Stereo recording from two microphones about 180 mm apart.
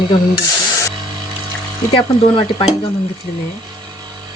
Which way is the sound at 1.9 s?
30° left (ahead or behind).